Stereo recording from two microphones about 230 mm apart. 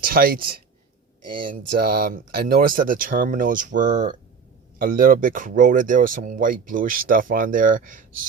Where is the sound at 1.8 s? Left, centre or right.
Right.